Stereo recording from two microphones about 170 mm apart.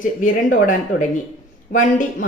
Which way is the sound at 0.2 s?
50° left (ahead or behind).